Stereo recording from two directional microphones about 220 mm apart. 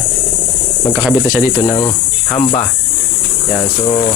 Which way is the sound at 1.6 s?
15° left (ahead or behind).